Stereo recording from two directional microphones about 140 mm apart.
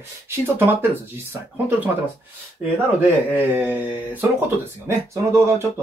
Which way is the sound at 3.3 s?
15° right (ahead or behind).